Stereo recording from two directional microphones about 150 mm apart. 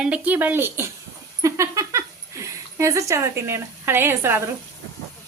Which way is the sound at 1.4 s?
20° right (ahead or behind).